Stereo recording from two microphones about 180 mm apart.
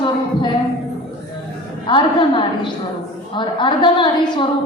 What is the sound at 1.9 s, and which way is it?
A woman's voice, 25° left (ahead or behind).